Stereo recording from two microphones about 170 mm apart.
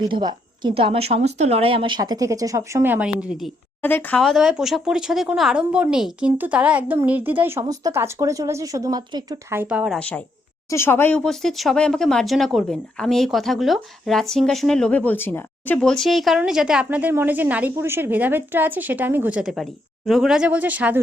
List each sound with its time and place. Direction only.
0.1 s a woman's voice: 25° right (ahead or behind); by 3.5 s 5° right (ahead or behind)
3.8 s speech: 10° left (ahead or behind); by 9.6 s 25° right (ahead or behind)
9.6 s speech: 5° right (ahead or behind)
10.0 s speech: 10° left (ahead or behind); by 21.0 s 10° right (ahead or behind)